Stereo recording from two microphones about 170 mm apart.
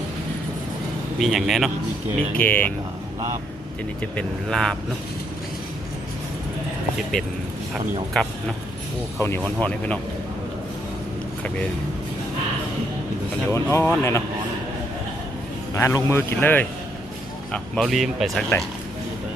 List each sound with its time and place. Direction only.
1.2 s speech: centre (ahead or behind)
2.3 s speech: 10° left (ahead or behind)
4.0 s speech: 5° left (ahead or behind)
7.7 s speech: centre (ahead or behind)
9.1 s speech: 15° left (ahead or behind)
13.5 s speech: 15° left (ahead or behind)
15.7 s speech: 20° left (ahead or behind); by 18.5 s centre (ahead or behind)